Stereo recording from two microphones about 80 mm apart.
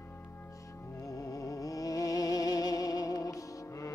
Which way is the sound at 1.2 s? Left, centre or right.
Left.